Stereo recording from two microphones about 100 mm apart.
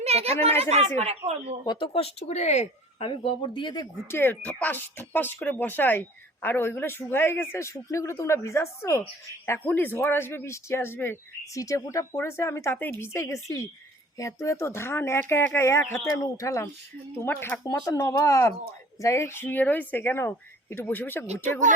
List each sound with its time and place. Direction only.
0.0 s speech: 90° right
1.8 s speech: 70° left (ahead or behind); by 3.8 s 50° left (ahead or behind)
4.1 s speech: 20° left (ahead or behind)
11.5 s speech: 35° left (ahead or behind)
17.2 s speech: 20° left (ahead or behind)
17.6 s speech: 35° left (ahead or behind)